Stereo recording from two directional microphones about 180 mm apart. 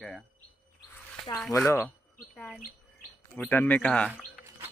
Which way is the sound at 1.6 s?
15° left (ahead or behind).